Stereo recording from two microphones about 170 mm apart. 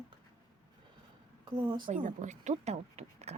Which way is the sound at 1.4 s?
30° right (ahead or behind).